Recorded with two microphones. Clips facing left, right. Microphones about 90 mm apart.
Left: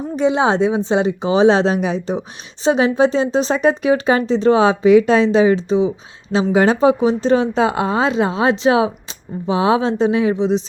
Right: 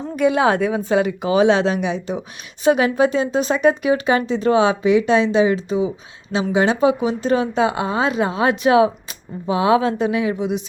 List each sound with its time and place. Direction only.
0.2 s a woman's voice: 25° left (ahead or behind)